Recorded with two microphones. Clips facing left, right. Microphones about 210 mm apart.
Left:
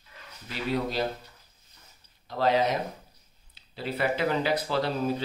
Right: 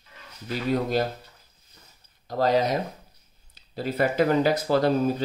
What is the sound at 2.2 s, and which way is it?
Speech, 40° right (ahead or behind).